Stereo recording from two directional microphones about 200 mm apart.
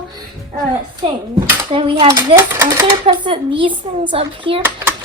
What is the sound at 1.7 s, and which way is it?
A child's voice, 25° right (ahead or behind).